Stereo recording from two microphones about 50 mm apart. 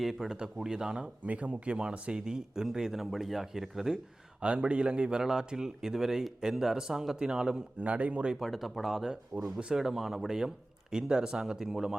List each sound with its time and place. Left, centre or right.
0.0 s speech: centre
1.3 s speech: right; by 4.0 s centre
4.4 s speech: right
7.8 s a man's voice: right
8.4 s speech: centre
9.3 s speech: centre